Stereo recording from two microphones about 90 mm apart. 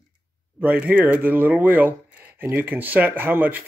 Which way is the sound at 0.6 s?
20° right (ahead or behind).